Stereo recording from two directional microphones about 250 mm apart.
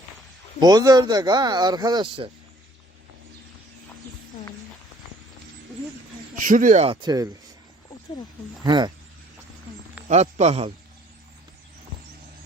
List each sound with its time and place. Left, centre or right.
0.6 s speech: centre
6.3 s speech: right; by 7.3 s centre
8.6 s speech: centre
10.1 s speech: right